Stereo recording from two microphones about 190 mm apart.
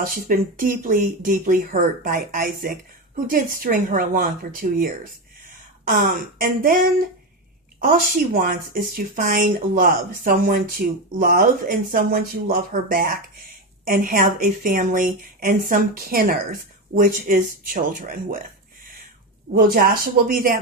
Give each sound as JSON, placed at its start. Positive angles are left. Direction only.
{"t": 0.0, "sound": "speech", "side_deg": -50}
{"t": 6.4, "sound": "speech", "side_deg": -45}